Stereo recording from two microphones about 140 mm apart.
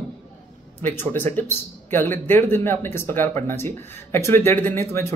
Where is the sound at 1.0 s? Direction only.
15° left (ahead or behind).